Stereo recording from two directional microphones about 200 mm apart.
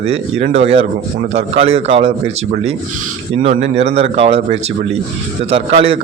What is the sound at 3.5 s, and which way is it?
A man's voice, 30° right (ahead or behind).